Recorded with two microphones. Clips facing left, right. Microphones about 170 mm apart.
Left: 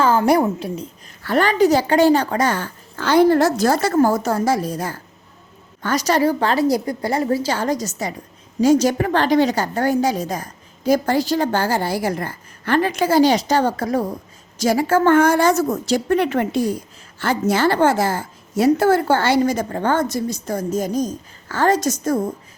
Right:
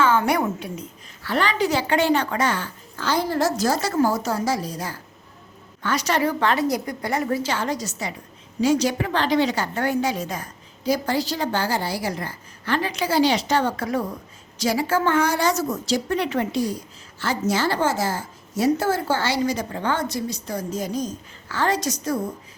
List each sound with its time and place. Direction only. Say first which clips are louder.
0.0 s a woman's voice: left 4 dB; 35° left (ahead or behind)
1.2 s a woman's voice: left 6 dB; 45° left (ahead or behind)
5.8 s a woman's voice: left 5 dB; 40° left (ahead or behind)